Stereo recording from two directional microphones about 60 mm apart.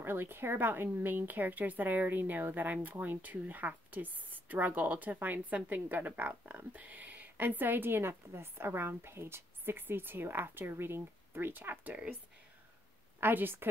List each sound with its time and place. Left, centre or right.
0.0 s speech: right
13.2 s speech: right